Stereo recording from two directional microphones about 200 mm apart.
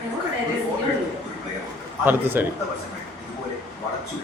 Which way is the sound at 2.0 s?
10° right (ahead or behind).